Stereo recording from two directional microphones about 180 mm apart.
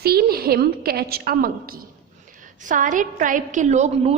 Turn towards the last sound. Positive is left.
turn(degrees=-40)  # may be behind; listen again after turning